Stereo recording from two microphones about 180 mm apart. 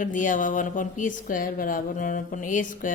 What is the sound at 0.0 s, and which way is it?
Speech, 45° left (ahead or behind).